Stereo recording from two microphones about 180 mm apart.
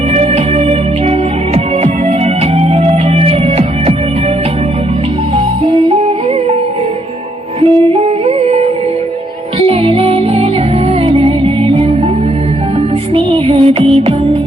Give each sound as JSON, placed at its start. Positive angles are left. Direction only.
{"t": 0.1, "sound": "music", "side_deg": -35}
{"t": 5.6, "sound": "music", "side_deg": -30}
{"t": 7.6, "sound": "music", "side_deg": -30}
{"t": 13.1, "sound": "music", "side_deg": -30}